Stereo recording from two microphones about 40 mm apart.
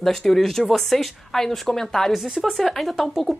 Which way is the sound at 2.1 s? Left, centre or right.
Centre.